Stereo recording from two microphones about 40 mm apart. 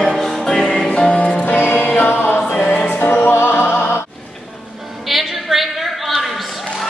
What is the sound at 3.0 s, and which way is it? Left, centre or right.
Music, left.